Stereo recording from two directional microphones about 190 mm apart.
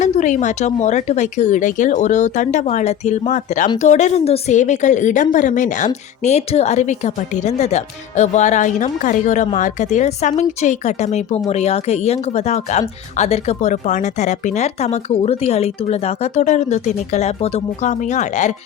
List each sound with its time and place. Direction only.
0.0 s a woman's voice: 40° left (ahead or behind)